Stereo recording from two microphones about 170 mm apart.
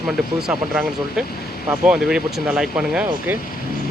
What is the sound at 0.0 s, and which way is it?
Speech, 5° right (ahead or behind).